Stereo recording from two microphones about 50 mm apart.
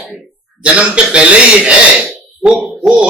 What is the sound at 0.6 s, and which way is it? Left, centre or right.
Speech, right.